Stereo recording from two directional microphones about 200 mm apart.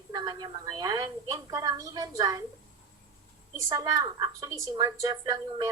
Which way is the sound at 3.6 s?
15° right (ahead or behind).